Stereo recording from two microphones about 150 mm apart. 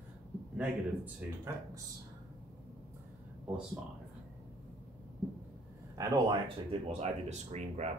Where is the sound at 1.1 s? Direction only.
20° right (ahead or behind).